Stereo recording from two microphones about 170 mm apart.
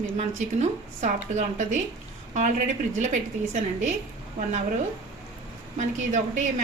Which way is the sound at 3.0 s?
45° right (ahead or behind).